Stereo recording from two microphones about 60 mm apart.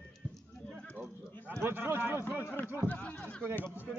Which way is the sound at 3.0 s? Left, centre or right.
Centre.